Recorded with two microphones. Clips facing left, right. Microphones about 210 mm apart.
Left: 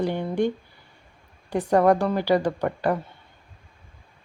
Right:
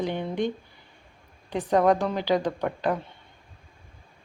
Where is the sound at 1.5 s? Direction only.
10° left (ahead or behind).